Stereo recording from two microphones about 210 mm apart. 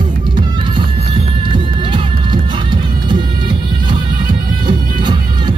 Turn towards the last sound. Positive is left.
turn(degrees=-20)  # may be behind; listen again after turning